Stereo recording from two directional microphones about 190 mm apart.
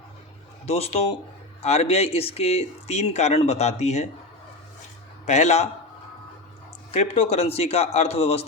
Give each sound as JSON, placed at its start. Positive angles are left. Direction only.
{"t": 0.6, "sound": "speech", "side_deg": 35}
{"t": 5.2, "sound": "speech", "side_deg": 35}
{"t": 6.9, "sound": "speech", "side_deg": 35}